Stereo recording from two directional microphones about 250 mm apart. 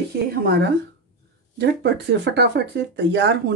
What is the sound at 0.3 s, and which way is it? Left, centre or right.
Speech, right.